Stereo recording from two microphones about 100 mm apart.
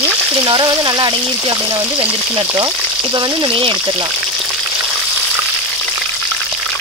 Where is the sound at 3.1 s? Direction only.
45° right (ahead or behind).